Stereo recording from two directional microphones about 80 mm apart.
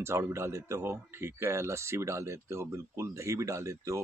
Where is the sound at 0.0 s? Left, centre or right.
Right.